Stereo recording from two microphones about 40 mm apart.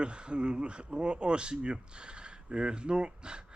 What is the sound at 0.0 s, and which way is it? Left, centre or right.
Speech, right.